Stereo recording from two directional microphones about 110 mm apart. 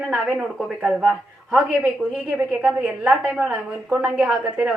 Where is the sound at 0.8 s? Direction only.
5° right (ahead or behind).